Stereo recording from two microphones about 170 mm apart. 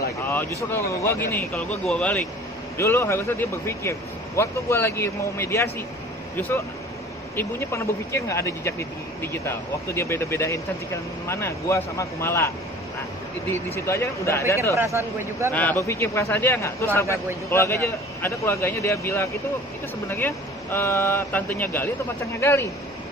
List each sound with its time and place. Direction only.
0.6 s speech: 15° left (ahead or behind)
7.3 s speech: 15° left (ahead or behind)
13.7 s speech: 15° left (ahead or behind)
14.8 s speech: 15° right (ahead or behind)
15.5 s speech: 10° left (ahead or behind)